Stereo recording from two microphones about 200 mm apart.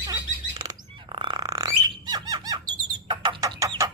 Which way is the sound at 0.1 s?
20° right (ahead or behind).